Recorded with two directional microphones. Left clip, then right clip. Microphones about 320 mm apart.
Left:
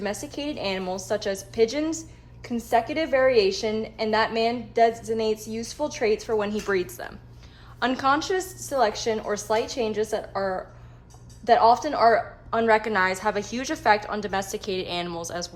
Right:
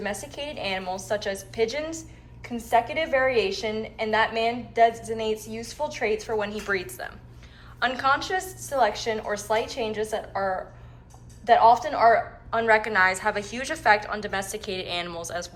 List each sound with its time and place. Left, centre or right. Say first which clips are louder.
0.0 s a woman's voice: left 1 dB; centre